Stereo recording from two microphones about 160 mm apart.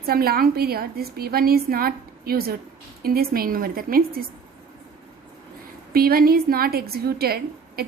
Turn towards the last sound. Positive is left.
turn(degrees=-75)  # may be behind; listen again after turning